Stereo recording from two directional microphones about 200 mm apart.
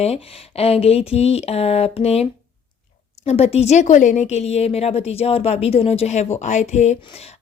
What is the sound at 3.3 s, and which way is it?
A woman's voice, 30° left (ahead or behind).